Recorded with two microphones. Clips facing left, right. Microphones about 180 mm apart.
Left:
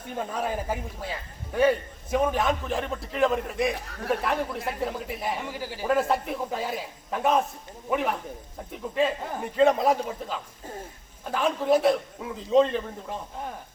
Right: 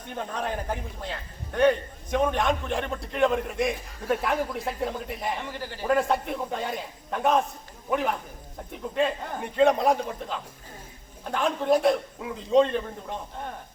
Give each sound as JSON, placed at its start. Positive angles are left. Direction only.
{"t": 0.2, "sound": "a man's voice", "side_deg": 5}
{"t": 3.8, "sound": "a man's voice", "side_deg": 70}
{"t": 4.1, "sound": "a man's voice", "side_deg": 0}